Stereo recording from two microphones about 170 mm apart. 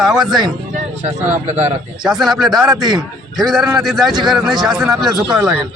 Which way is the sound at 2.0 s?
Centre (ahead or behind).